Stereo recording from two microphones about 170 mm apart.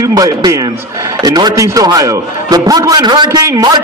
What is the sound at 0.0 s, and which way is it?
A man's voice, 20° right (ahead or behind).